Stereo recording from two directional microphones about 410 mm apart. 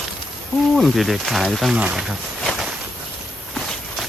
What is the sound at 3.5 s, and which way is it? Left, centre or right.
Walk, centre.